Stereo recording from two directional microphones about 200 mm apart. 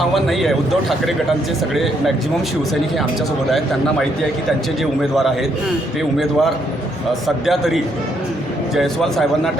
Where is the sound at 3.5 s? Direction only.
Centre (ahead or behind).